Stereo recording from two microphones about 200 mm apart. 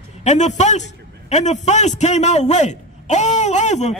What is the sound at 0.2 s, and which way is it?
A man's voice, 35° left (ahead or behind).